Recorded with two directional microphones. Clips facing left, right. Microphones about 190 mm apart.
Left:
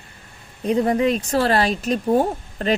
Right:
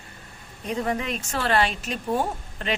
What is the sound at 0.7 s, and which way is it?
Speech, 35° left (ahead or behind).